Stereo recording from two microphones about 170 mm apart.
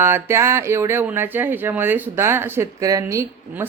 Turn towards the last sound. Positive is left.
turn(degrees=-15)  # may be behind; listen again after turning